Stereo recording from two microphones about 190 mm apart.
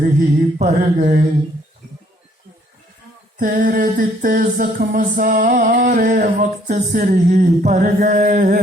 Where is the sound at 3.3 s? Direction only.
45° right (ahead or behind).